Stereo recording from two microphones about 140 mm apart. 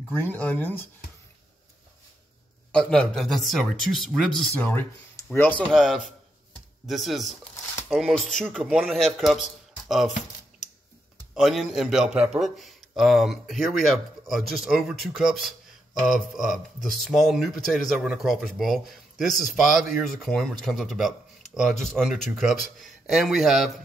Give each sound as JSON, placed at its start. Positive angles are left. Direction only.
{"t": 0.1, "sound": "speech", "side_deg": 15}
{"t": 2.7, "sound": "speech", "side_deg": 5}
{"t": 5.7, "sound": "speech", "side_deg": 0}
{"t": 8.4, "sound": "speech", "side_deg": 5}
{"t": 11.3, "sound": "speech", "side_deg": 0}